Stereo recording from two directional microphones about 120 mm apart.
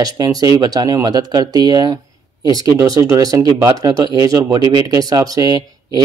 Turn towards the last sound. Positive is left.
turn(degrees=-30)  # may be behind; listen again after turning